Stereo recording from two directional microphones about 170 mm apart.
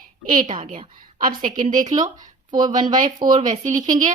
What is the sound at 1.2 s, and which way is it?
Speech, 55° right (ahead or behind).